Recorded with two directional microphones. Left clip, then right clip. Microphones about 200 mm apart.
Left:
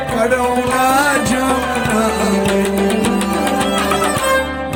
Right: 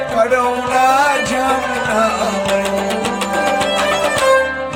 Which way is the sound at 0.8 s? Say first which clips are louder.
Right 3 dB; 50° left (ahead or behind).